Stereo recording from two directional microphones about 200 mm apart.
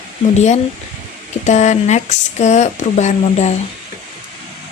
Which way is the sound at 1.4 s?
35° left (ahead or behind).